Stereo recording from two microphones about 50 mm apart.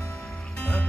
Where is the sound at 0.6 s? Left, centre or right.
Left.